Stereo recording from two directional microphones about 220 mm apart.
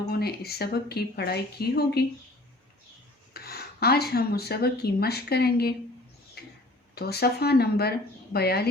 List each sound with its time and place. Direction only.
0.1 s speech: 45° left (ahead or behind)
3.3 s speech: 45° left (ahead or behind)
6.4 s a sound: 45° left (ahead or behind)
6.9 s speech: 45° left (ahead or behind)